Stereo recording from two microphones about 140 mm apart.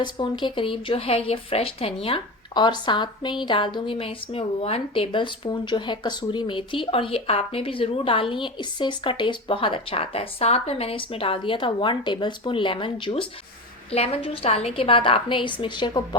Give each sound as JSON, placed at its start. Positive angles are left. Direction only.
{"t": 0.0, "sound": "speech", "side_deg": 35}